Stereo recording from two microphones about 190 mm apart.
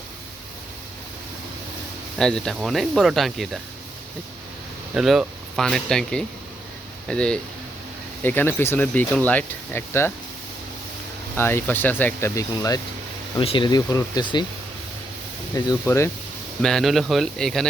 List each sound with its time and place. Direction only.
2.1 s speech: 5° left (ahead or behind)
4.9 s speech: centre (ahead or behind)
11.3 s speech: 10° left (ahead or behind)
13.4 s speech: 25° left (ahead or behind)
15.5 s speech: 15° left (ahead or behind)
16.6 s speech: centre (ahead or behind)